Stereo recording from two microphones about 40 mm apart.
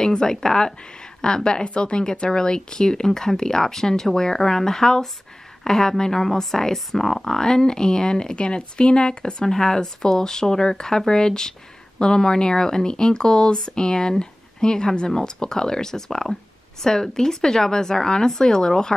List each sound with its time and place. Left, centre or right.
0.0 s speech: centre